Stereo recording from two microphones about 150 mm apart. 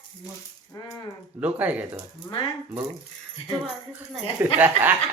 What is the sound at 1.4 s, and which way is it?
Speech, 10° right (ahead or behind).